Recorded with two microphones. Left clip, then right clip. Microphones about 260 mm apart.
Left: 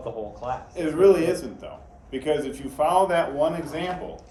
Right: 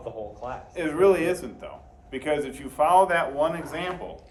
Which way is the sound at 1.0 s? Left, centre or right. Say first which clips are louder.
Left 3 dB; right.